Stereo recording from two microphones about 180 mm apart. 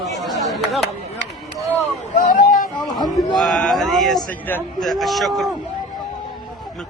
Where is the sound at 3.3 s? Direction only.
Centre (ahead or behind).